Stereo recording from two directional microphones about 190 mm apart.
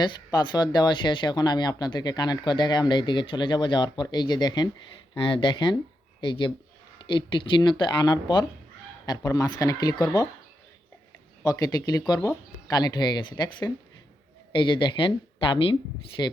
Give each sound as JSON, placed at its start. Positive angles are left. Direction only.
{"t": 0.0, "sound": "speech", "side_deg": 20}
{"t": 11.4, "sound": "speech", "side_deg": 20}